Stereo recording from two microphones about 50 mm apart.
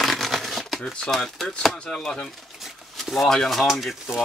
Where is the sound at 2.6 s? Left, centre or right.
Centre.